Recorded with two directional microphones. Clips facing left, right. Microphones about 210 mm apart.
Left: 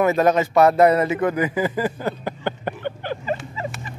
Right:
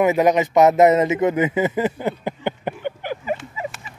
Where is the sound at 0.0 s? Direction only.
15° right (ahead or behind).